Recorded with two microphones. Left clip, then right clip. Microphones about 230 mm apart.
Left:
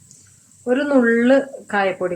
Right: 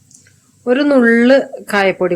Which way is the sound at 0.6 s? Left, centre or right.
Right.